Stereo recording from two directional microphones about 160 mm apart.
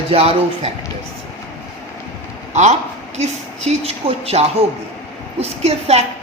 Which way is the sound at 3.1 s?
40° right (ahead or behind).